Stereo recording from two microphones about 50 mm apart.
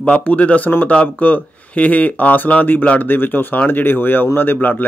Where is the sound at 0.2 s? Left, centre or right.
Left.